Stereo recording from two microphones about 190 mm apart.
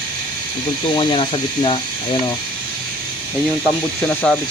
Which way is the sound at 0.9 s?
25° left (ahead or behind).